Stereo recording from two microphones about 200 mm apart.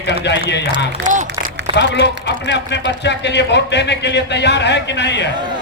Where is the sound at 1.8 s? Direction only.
60° left (ahead or behind).